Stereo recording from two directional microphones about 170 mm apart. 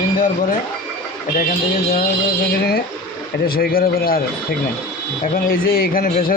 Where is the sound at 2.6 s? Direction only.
65° left (ahead or behind).